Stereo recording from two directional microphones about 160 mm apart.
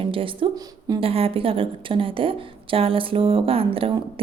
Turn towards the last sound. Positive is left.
turn(degrees=-35)  # may be behind; listen again after turning